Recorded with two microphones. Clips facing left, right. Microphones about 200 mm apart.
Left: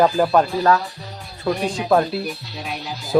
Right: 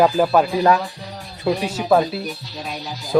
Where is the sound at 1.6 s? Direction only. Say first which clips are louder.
Even; 5° right (ahead or behind).